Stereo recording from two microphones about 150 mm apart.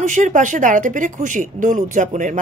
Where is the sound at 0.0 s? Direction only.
55° right (ahead or behind).